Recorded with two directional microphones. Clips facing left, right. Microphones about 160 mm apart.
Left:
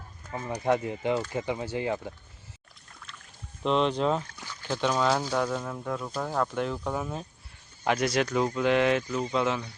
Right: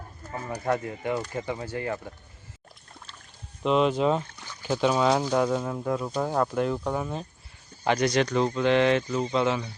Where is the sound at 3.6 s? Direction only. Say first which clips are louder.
Right 3 dB; 5° right (ahead or behind).